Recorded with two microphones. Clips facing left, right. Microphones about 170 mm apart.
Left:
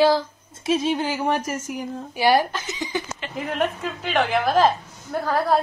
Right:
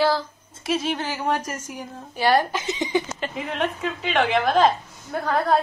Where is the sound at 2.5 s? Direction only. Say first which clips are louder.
Right 4 dB; 20° right (ahead or behind).